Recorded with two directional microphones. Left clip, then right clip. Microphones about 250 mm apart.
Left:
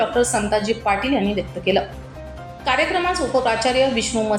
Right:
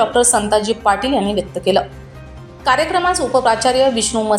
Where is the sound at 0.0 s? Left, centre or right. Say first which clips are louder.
Right 5 dB; centre.